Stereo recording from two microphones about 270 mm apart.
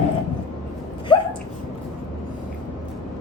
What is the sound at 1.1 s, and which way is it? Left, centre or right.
Hiccup, centre.